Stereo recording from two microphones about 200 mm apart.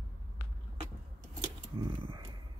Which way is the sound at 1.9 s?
20° right (ahead or behind).